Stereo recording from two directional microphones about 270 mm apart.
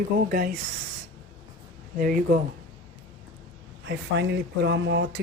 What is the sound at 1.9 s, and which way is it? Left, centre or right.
Speech, right.